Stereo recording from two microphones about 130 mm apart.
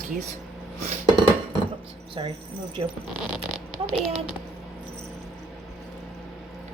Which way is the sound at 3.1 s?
5° right (ahead or behind).